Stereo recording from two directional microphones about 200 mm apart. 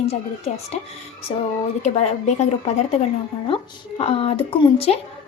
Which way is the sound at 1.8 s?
35° left (ahead or behind).